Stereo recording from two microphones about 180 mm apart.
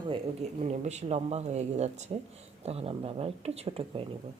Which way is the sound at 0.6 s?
40° right (ahead or behind).